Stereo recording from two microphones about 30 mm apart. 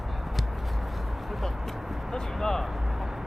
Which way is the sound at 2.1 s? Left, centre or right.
Centre.